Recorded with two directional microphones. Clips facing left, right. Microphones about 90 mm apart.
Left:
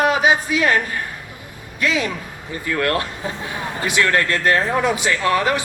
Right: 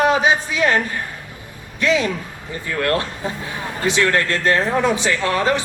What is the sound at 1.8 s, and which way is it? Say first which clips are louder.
Speech: right 3 dB; 30° right (ahead or behind).